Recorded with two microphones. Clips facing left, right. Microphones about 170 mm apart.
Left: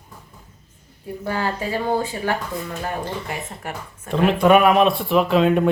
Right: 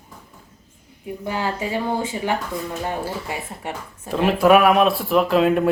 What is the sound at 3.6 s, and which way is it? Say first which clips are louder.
Speech: right 1 dB; 25° right (ahead or behind).